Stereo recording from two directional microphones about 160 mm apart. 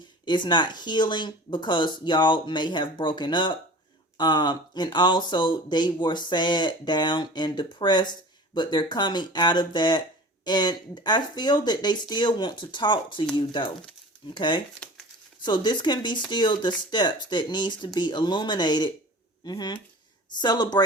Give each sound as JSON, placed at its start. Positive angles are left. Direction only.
{"t": 0.3, "sound": "speech", "side_deg": 30}